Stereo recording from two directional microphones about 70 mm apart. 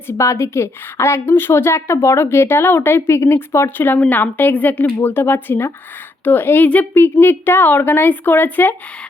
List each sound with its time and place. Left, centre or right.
0.1 s a woman's voice: left